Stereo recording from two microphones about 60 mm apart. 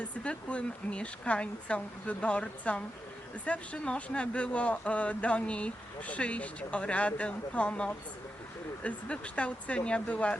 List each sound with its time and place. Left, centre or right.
0.3 s speech: centre